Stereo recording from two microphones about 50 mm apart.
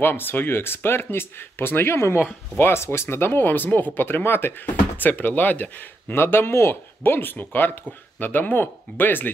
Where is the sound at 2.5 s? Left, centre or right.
Left.